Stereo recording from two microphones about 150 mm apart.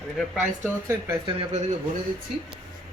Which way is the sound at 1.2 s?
35° right (ahead or behind).